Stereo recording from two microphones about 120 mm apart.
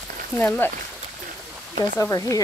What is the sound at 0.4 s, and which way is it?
Speech, 15° left (ahead or behind).